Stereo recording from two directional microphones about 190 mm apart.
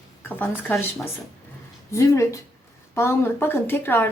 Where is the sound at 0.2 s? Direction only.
10° left (ahead or behind).